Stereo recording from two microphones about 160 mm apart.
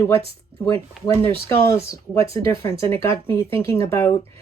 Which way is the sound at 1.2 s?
15° left (ahead or behind).